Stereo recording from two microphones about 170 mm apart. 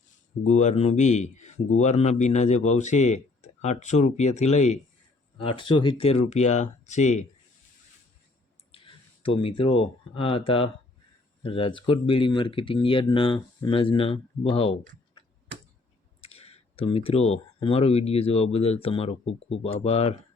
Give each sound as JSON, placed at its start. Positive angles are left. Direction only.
{"t": 0.4, "sound": "speech", "side_deg": 45}
{"t": 5.4, "sound": "speech", "side_deg": 30}
{"t": 8.7, "sound": "speech", "side_deg": 30}
{"t": 16.2, "sound": "speech", "side_deg": 35}